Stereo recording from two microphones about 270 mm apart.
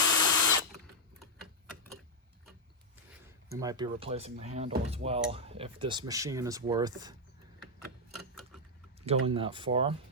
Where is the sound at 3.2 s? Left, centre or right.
Centre.